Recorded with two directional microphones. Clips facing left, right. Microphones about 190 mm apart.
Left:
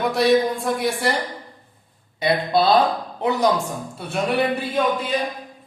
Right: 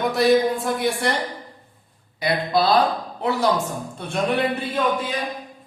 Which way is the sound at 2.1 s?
25° left (ahead or behind).